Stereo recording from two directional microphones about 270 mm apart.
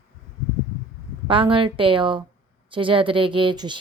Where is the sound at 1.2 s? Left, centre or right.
Centre.